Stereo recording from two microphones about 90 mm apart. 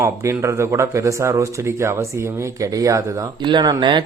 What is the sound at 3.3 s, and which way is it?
Speech, 60° right (ahead or behind).